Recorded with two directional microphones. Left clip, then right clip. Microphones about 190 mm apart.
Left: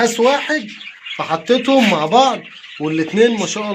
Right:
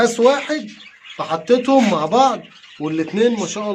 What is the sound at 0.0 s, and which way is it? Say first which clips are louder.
Speech: even; centre (ahead or behind).